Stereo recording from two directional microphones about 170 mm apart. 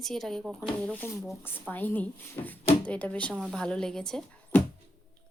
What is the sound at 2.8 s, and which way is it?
Speech, 10° left (ahead or behind).